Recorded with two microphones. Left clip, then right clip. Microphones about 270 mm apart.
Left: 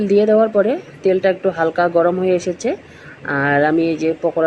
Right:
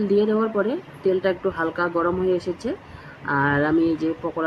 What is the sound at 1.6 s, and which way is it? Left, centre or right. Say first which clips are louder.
Speech: left 8 dB; left.